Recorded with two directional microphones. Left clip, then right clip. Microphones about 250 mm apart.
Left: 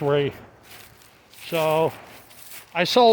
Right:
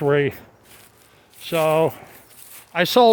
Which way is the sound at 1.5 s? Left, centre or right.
Right.